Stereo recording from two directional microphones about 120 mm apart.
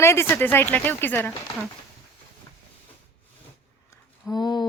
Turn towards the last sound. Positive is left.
turn(degrees=35)  # may be behind; listen again after turning